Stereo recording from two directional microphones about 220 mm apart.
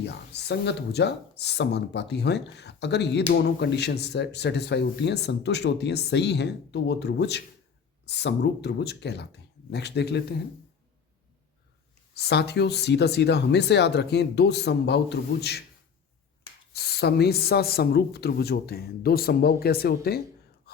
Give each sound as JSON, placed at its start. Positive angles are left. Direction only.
{"t": 0.0, "sound": "speech", "side_deg": 50}
{"t": 12.1, "sound": "speech", "side_deg": 50}
{"t": 16.7, "sound": "speech", "side_deg": 45}